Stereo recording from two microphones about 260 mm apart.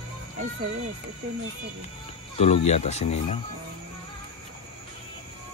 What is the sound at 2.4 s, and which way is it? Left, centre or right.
Speech, left.